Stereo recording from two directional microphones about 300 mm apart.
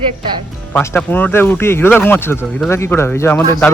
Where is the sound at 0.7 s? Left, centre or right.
Centre.